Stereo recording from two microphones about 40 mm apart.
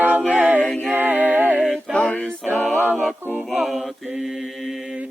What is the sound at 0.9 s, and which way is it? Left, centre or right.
Music, right.